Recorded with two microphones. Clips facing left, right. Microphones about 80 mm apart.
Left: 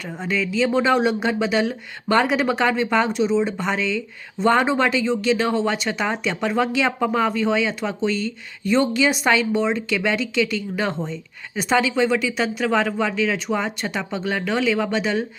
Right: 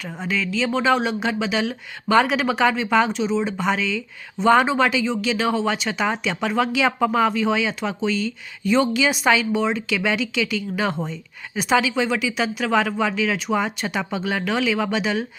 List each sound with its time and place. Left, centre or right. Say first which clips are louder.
0.0 s speech: left 1 dB; centre